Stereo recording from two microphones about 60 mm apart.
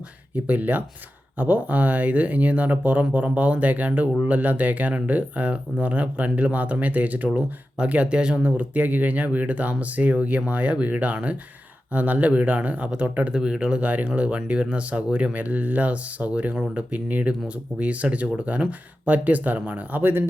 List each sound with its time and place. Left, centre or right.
0.3 s speech: right
7.3 s speech: centre
8.4 s speech: right
13.8 s speech: right